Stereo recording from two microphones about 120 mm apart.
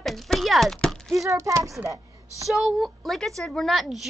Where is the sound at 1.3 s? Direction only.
25° right (ahead or behind).